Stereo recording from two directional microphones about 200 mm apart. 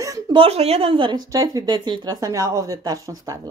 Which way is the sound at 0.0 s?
20° right (ahead or behind).